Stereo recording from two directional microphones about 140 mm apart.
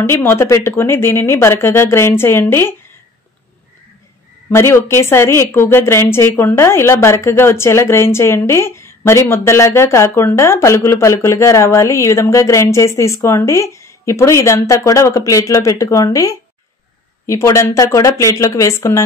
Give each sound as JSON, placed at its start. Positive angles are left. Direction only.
{"t": 0.0, "sound": "speech", "side_deg": 15}
{"t": 4.5, "sound": "a woman's voice", "side_deg": 20}